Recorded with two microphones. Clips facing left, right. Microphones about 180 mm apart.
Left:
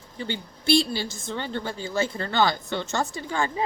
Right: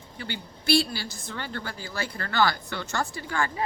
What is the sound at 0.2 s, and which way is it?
Speech, 25° left (ahead or behind).